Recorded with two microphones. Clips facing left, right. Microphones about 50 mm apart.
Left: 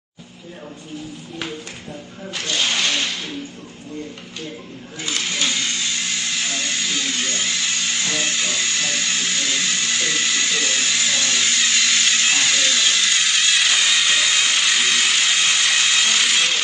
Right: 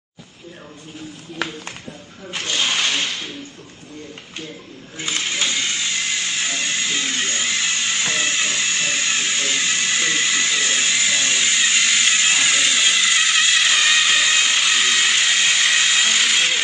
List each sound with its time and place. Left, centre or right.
2.3 s speech: right
4.9 s speech: right
5.9 s music: right
11.2 s a sound: right